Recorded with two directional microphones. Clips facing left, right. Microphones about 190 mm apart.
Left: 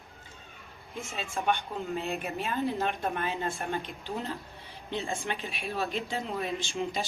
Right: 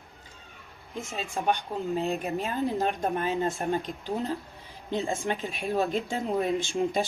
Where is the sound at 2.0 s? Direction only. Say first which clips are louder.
Right 5 dB; 35° right (ahead or behind).